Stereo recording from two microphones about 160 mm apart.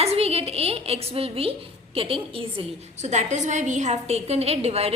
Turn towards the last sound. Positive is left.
turn(degrees=-40)  # may be behind; listen again after turning